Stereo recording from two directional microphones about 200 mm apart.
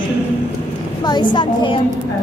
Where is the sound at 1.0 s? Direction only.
20° left (ahead or behind).